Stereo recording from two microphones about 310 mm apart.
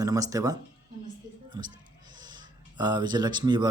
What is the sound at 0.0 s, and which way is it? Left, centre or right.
Speech, centre.